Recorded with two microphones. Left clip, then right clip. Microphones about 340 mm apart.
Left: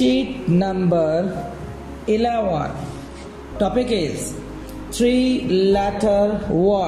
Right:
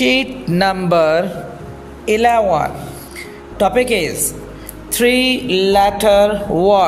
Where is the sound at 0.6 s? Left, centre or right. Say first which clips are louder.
Right 7 dB; right.